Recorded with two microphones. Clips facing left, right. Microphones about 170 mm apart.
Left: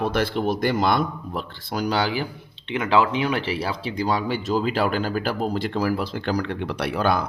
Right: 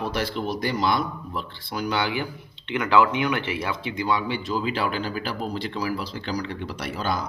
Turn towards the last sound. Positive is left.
turn(degrees=60)  # may be behind; listen again after turning